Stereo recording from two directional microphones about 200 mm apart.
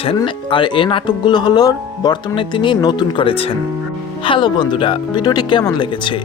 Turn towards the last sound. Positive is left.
turn(degrees=25)  # may be behind; listen again after turning